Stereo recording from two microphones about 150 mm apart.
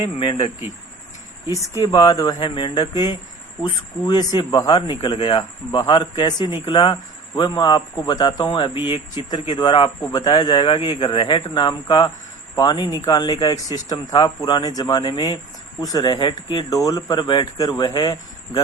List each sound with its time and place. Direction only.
0.0 s speech: 40° left (ahead or behind)
1.8 s speech: 25° left (ahead or behind)